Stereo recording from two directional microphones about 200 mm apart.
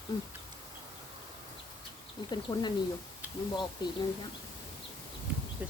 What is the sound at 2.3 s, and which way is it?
Speech, 20° left (ahead or behind).